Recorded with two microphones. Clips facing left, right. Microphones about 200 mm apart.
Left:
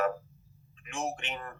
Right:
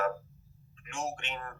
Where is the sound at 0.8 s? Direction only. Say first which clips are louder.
Left 2 dB; 20° left (ahead or behind).